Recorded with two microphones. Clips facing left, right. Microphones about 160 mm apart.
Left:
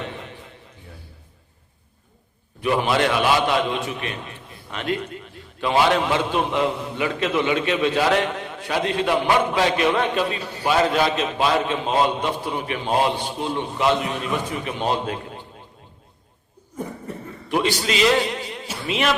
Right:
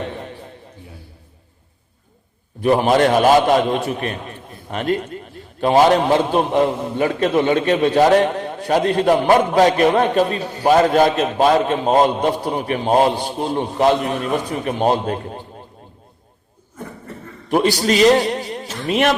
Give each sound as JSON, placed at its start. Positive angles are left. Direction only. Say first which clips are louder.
{"t": 2.6, "sound": "a man's voice", "louder": "right 6 dB", "side_deg": -40}
{"t": 17.5, "sound": "a man's voice", "louder": "right 6 dB", "side_deg": -40}
{"t": 18.9, "sound": "a man's voice", "louder": "right 6 dB", "side_deg": -50}